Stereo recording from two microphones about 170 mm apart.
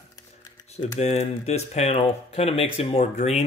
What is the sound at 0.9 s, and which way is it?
Speech, 40° left (ahead or behind).